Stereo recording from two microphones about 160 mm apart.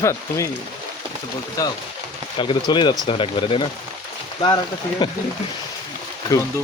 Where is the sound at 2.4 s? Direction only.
30° left (ahead or behind).